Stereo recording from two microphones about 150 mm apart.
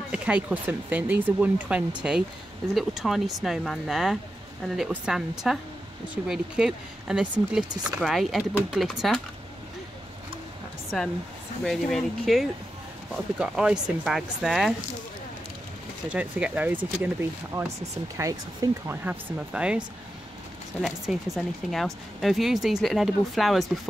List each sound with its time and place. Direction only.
0.1 s speech: 10° right (ahead or behind)
10.9 s speech: centre (ahead or behind)
16.1 s speech: 10° right (ahead or behind)
19.0 s speech: 5° right (ahead or behind)
21.1 s speech: 5° right (ahead or behind)